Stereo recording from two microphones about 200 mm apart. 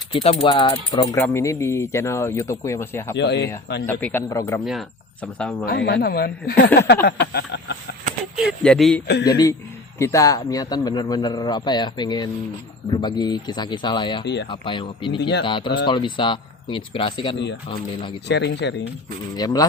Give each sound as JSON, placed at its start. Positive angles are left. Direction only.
{"t": 0.1, "sound": "a man's voice", "side_deg": 30}
{"t": 1.1, "sound": "speech", "side_deg": 10}
{"t": 3.2, "sound": "speech", "side_deg": 60}
{"t": 3.8, "sound": "speech", "side_deg": 10}
{"t": 4.6, "sound": "speech", "side_deg": 0}
{"t": 5.6, "sound": "speech", "side_deg": 50}
{"t": 6.7, "sound": "a sound", "side_deg": 55}
{"t": 8.4, "sound": "speech", "side_deg": 0}
{"t": 9.2, "sound": "a man's voice", "side_deg": 20}
{"t": 15.2, "sound": "speech", "side_deg": 55}
{"t": 15.4, "sound": "a man's voice", "side_deg": 25}
{"t": 18.3, "sound": "speech", "side_deg": 60}
{"t": 19.4, "sound": "a man's voice", "side_deg": 20}